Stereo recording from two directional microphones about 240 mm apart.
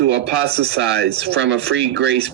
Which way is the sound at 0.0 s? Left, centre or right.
Right.